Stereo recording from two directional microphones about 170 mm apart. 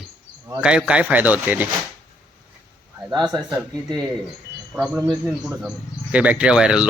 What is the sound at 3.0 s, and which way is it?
Speech, 20° right (ahead or behind).